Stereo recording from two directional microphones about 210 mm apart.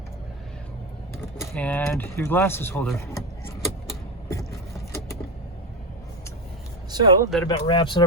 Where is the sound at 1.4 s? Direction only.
5° left (ahead or behind).